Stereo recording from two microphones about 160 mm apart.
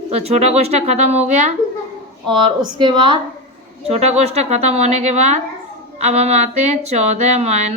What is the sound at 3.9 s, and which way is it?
Speech, 40° right (ahead or behind).